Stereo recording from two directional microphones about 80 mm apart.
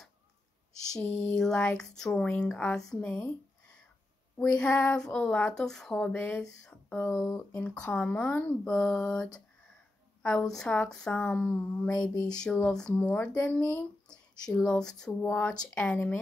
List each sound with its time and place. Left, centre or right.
0.8 s a sound: centre
1.1 s speech: centre
4.4 s speech: centre
6.1 s speech: left
6.9 s speech: centre
12.9 s speech: centre
15.2 s speech: left